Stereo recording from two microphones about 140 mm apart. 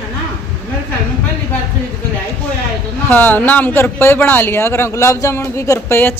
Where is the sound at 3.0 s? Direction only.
15° left (ahead or behind).